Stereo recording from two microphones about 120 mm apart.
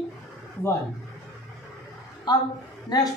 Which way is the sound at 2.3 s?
35° left (ahead or behind).